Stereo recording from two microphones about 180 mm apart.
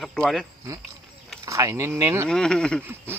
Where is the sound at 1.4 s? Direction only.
15° right (ahead or behind).